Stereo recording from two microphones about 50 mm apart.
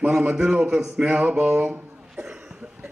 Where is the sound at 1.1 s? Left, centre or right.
Right.